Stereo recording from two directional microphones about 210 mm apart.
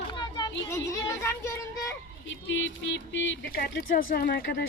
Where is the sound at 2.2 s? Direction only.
65° left (ahead or behind).